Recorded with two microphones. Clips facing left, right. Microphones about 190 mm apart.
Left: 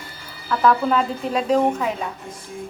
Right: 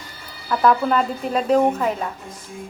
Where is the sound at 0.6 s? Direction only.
Centre (ahead or behind).